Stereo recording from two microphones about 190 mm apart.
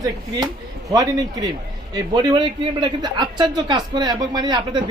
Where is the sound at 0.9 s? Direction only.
20° right (ahead or behind).